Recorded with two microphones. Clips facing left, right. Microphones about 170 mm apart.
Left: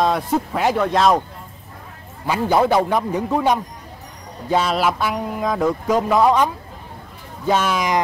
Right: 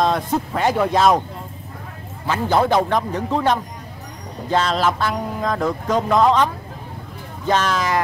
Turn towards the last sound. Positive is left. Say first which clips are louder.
# left 1 dB
turn(degrees=10)  # may be behind; listen again after turning